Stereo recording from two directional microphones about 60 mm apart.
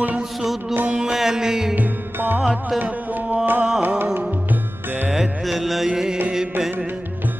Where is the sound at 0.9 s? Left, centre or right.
Centre.